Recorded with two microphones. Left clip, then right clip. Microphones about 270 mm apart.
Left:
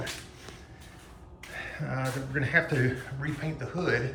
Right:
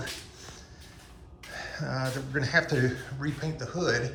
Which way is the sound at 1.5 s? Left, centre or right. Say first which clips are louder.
Right 1 dB; centre.